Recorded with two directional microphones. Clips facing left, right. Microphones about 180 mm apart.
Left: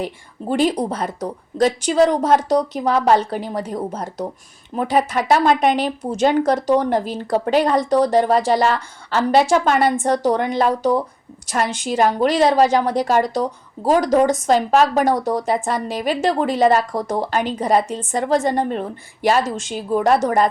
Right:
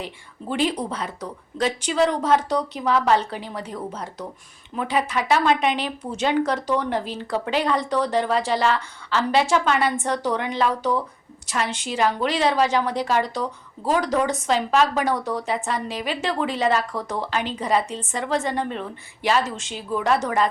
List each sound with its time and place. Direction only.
0.0 s a woman's voice: 40° left (ahead or behind)